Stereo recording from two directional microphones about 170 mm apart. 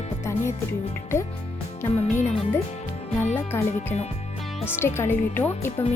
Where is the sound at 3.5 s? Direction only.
15° left (ahead or behind).